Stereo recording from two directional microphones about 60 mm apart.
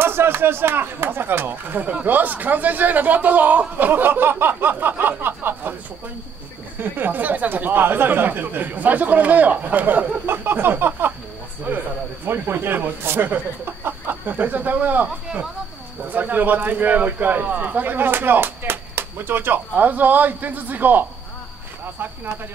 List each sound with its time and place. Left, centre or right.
0.0 s speech: right
6.8 s speech: right